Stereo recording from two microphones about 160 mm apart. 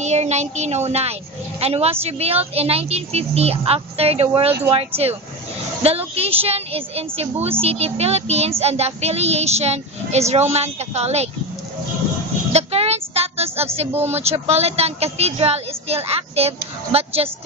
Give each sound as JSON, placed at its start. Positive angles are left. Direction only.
{"t": 0.0, "sound": "a woman's voice", "side_deg": -45}
{"t": 12.5, "sound": "a sound", "side_deg": -40}
{"t": 13.7, "sound": "a woman's voice", "side_deg": -40}